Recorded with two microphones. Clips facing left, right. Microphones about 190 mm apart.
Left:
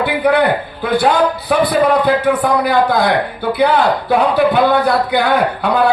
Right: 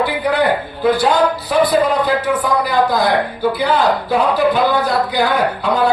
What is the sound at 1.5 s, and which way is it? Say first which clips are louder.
A man's voice: left 2 dB; 60° left (ahead or behind).